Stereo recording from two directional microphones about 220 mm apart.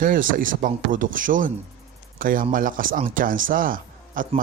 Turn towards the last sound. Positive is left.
turn(degrees=-40)  # may be behind; listen again after turning